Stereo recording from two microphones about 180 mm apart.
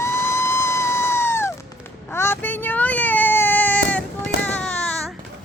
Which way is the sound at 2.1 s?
15° left (ahead or behind).